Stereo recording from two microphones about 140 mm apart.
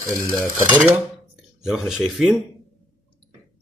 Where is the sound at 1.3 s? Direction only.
5° right (ahead or behind).